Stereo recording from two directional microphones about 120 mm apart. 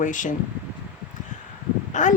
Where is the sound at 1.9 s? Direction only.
90° left.